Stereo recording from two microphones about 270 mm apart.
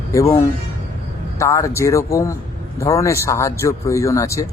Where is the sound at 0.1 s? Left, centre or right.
Centre.